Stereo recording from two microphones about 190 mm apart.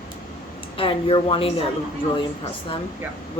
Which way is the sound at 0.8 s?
30° left (ahead or behind).